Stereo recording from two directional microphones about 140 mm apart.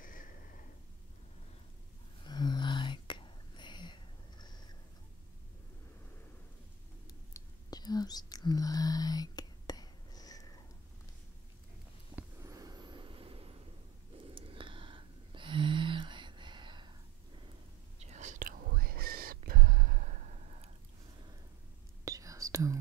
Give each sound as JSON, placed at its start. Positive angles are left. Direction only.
{"t": 0.0, "sound": "a sound", "side_deg": 75}
{"t": 2.2, "sound": "whispering", "side_deg": 30}
{"t": 7.1, "sound": "whispering", "side_deg": 25}
{"t": 12.4, "sound": "vehicle", "side_deg": -25}
{"t": 14.3, "sound": "a sound", "side_deg": -40}
{"t": 17.9, "sound": "whispering", "side_deg": -55}
{"t": 22.0, "sound": "whispering", "side_deg": -25}